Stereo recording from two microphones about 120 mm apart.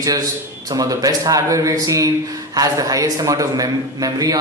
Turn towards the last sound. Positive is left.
turn(degrees=-30)  # may be behind; listen again after turning